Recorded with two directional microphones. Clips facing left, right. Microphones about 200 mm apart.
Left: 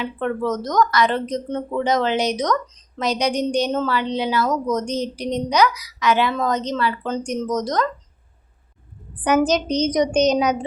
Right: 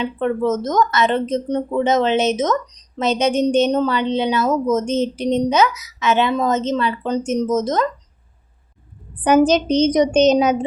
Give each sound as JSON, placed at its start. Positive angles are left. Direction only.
{"t": 0.0, "sound": "speech", "side_deg": -20}
{"t": 9.2, "sound": "speech", "side_deg": -30}